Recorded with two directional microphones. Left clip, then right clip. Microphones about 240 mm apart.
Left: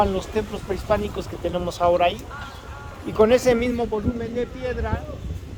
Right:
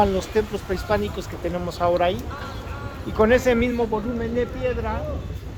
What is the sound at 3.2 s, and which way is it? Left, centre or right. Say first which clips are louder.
Speech: left 1 dB; left.